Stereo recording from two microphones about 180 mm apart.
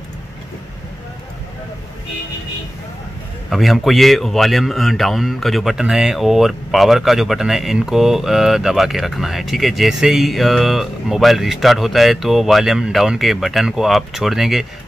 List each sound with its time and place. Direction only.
3.4 s speech: centre (ahead or behind)